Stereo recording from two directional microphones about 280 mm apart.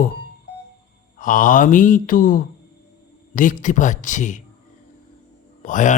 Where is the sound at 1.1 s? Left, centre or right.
Left.